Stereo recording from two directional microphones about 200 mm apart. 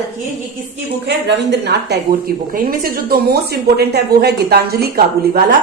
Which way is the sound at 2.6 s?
45° right (ahead or behind).